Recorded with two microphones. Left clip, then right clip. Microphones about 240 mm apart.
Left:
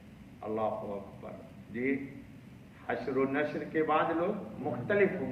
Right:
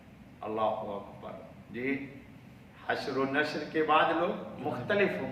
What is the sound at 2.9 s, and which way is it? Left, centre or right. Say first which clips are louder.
A man's voice: right 1 dB; right.